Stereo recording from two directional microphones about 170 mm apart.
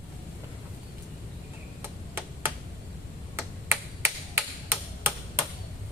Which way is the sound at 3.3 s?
15° right (ahead or behind).